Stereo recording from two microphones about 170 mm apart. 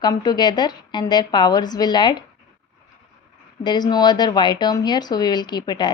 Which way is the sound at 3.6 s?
25° left (ahead or behind).